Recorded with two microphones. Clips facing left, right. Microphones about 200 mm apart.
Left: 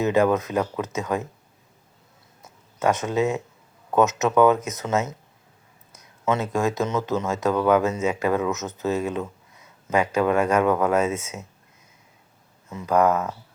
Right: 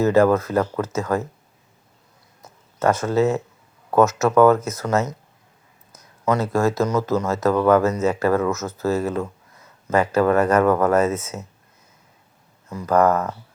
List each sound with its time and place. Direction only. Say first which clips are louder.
0.0 s speech: right 4 dB; 15° left (ahead or behind)
2.7 s speech: right 3 dB; 15° left (ahead or behind)
6.3 s speech: right 4 dB; 15° left (ahead or behind)
12.7 s speech: right 2 dB; 15° left (ahead or behind)